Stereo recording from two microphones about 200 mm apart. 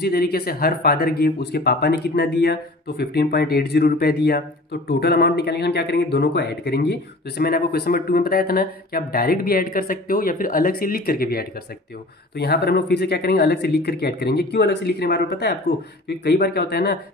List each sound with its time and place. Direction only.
0.0 s speech: 50° left (ahead or behind)